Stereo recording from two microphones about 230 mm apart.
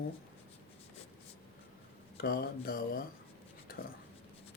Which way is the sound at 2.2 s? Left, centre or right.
Left.